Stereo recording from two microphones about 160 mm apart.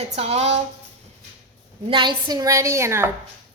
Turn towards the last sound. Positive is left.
turn(degrees=-15)  # may be behind; listen again after turning